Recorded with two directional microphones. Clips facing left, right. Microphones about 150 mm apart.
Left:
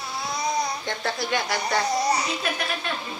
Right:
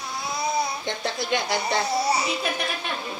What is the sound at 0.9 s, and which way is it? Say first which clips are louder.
Speech: right 1 dB; 25° right (ahead or behind).